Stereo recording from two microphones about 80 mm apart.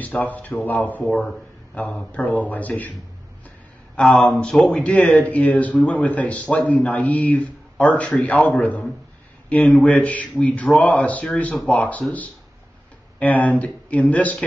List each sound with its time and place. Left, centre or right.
0.0 s a man's voice: centre
1.0 s a man's voice: centre
1.8 s a man's voice: centre
3.9 s a man's voice: centre
13.2 s a man's voice: left